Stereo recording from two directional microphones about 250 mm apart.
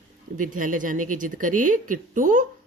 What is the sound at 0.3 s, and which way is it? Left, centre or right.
Speech, right.